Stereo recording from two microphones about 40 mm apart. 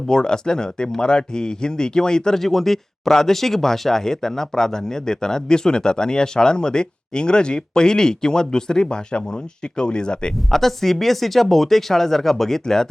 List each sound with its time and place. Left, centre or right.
0.1 s speech: centre
2.4 s speech: centre; by 10.3 s left
10.5 s speech: centre